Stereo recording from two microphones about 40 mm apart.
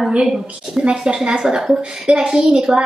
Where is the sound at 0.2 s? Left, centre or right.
Centre.